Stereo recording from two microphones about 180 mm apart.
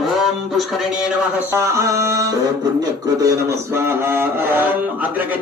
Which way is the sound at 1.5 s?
15° right (ahead or behind).